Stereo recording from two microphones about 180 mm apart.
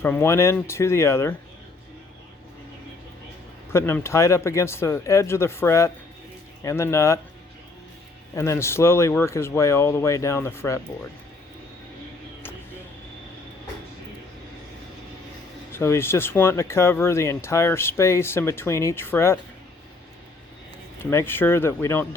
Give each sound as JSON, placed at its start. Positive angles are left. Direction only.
{"t": 0.0, "sound": "speech", "side_deg": 15}
{"t": 3.7, "sound": "speech", "side_deg": 15}
{"t": 8.4, "sound": "speech", "side_deg": 15}
{"t": 15.7, "sound": "speech", "side_deg": 15}
{"t": 21.0, "sound": "speech", "side_deg": 15}